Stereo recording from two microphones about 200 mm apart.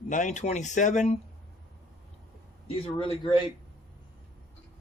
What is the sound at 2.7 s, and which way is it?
Speech, 25° left (ahead or behind).